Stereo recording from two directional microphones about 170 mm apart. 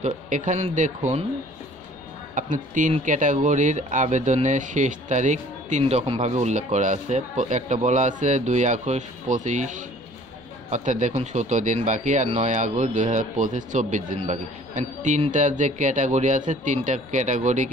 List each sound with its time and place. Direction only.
0.0 s speech: 45° right (ahead or behind)
2.3 s speech: 50° right (ahead or behind)